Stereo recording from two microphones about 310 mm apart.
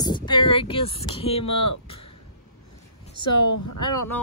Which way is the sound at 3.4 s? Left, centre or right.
Left.